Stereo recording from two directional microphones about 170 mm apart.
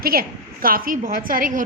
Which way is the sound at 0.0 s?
60° right (ahead or behind).